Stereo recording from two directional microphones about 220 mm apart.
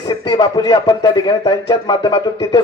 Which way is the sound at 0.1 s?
20° left (ahead or behind).